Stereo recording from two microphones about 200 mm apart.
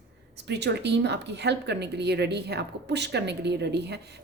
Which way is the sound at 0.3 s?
55° right (ahead or behind).